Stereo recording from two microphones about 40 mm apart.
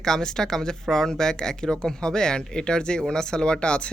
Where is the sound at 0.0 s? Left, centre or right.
Centre.